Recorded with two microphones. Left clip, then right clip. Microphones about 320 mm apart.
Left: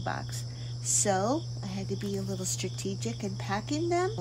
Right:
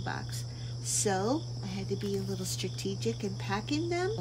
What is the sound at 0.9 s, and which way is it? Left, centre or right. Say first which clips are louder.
Speech: left 3 dB; left.